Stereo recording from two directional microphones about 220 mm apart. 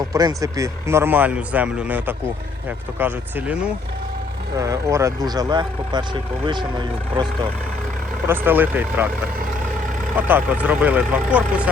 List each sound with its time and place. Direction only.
0.0 s speech: 15° right (ahead or behind)
8.3 s speech: 10° right (ahead or behind)
10.2 s speech: 10° right (ahead or behind)